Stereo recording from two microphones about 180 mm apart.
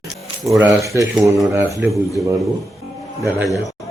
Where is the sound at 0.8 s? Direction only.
15° right (ahead or behind).